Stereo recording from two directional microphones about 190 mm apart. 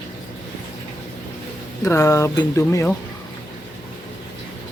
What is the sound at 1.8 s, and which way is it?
Speech, 15° left (ahead or behind).